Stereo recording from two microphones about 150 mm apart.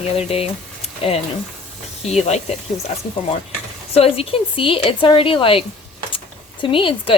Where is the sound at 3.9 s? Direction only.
40° left (ahead or behind).